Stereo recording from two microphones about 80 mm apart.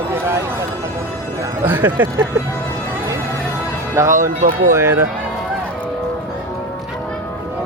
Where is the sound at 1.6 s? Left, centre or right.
Right.